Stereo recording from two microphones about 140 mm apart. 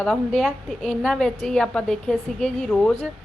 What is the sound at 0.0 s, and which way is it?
A woman's voice, 5° left (ahead or behind).